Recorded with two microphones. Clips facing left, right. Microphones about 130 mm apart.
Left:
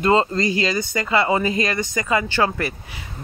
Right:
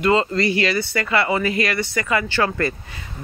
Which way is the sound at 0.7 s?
15° left (ahead or behind).